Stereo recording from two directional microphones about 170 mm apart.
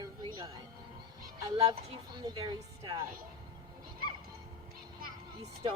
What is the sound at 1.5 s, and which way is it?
Speech, 20° right (ahead or behind).